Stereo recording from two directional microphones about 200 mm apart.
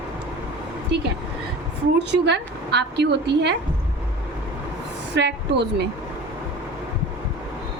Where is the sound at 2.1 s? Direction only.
60° right (ahead or behind).